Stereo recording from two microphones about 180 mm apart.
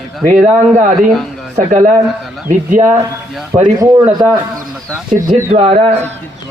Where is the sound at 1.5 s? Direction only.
45° right (ahead or behind).